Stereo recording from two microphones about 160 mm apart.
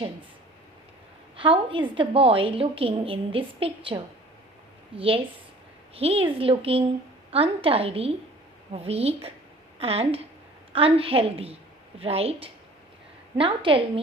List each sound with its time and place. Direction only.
1.4 s a woman's voice: 35° right (ahead or behind)